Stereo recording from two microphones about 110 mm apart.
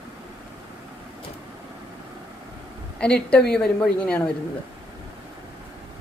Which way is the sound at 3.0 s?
10° left (ahead or behind).